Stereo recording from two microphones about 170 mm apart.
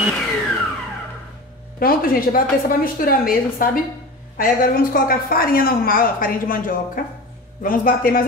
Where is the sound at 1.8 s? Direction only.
55° left (ahead or behind).